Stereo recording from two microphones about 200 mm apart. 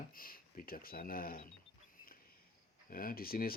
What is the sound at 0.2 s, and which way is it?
Speech, 45° left (ahead or behind).